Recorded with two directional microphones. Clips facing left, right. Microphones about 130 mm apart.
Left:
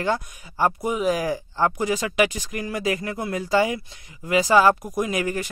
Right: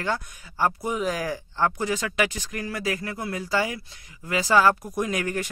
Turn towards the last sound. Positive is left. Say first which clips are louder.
# left 2 dB
turn(degrees=5)  # may be behind; listen again after turning